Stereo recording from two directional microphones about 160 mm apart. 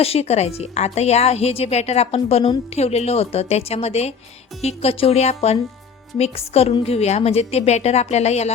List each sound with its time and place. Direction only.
0.0 s a woman's voice: 40° left (ahead or behind)